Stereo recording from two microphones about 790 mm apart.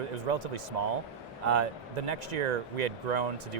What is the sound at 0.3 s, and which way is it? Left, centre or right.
Speech, right.